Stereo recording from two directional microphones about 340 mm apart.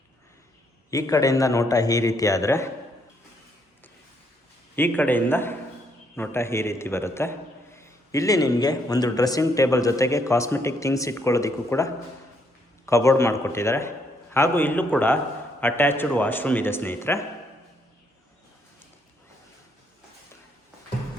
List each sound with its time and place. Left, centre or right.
0.9 s a man's voice: centre
4.7 s a man's voice: centre